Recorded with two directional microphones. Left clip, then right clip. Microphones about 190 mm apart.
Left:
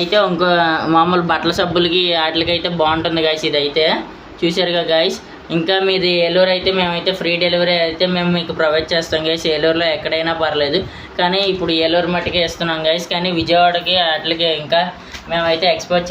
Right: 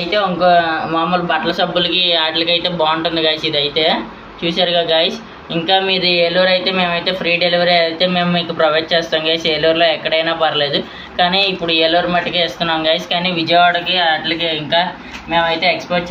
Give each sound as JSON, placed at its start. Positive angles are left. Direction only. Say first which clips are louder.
{"t": 0.1, "sound": "speech", "louder": "right 3 dB", "side_deg": 50}